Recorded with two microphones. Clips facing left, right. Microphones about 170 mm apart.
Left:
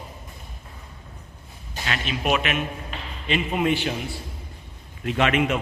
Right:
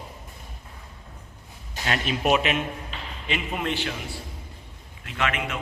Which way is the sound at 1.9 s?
40° right (ahead or behind).